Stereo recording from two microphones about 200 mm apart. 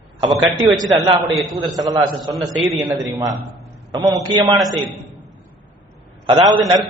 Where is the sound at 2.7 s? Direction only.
10° right (ahead or behind).